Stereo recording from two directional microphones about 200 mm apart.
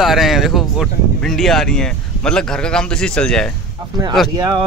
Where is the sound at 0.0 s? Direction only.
Centre (ahead or behind).